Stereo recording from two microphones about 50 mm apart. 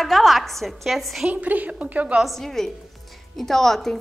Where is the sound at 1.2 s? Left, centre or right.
Right.